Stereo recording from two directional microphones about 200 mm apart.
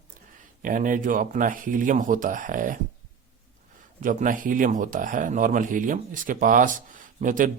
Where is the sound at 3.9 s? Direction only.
40° right (ahead or behind).